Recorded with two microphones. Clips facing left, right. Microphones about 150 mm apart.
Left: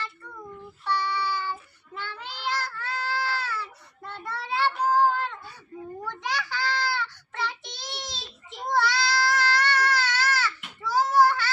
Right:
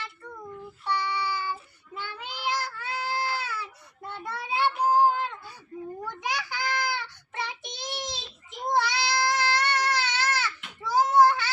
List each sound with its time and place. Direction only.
0.9 s child singing: 15° right (ahead or behind)
8.7 s baby cry: 20° right (ahead or behind)